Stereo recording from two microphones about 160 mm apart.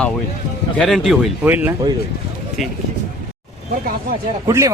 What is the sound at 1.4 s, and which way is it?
Speech, 15° right (ahead or behind).